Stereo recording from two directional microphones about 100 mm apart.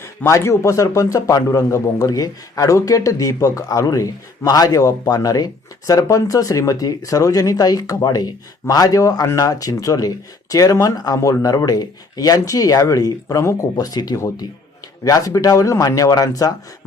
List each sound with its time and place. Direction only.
0.0 s a man's voice: 25° left (ahead or behind)